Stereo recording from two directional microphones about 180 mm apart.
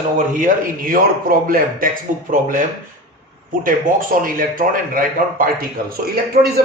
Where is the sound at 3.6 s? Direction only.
50° right (ahead or behind).